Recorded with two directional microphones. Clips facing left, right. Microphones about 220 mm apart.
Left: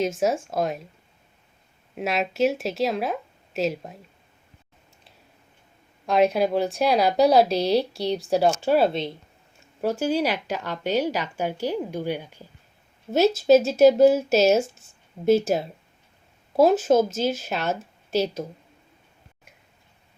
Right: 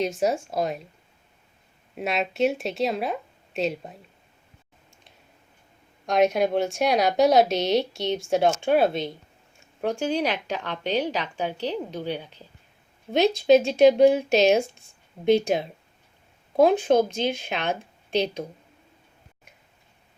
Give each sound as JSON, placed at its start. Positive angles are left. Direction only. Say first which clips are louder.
{"t": 0.0, "sound": "speech", "louder": "left 1 dB", "side_deg": 0}
{"t": 2.0, "sound": "speech", "louder": "left 1 dB", "side_deg": 0}
{"t": 6.5, "sound": "speech", "louder": "left 1 dB", "side_deg": 0}
{"t": 7.3, "sound": "speech", "louder": "left 1 dB", "side_deg": 30}
{"t": 8.2, "sound": "a woman's voice", "louder": "left 1 dB", "side_deg": 5}